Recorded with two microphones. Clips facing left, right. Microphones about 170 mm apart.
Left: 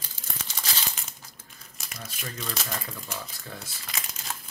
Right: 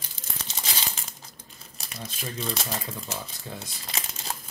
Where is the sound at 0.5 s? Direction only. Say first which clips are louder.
Right 1 dB; 20° right (ahead or behind).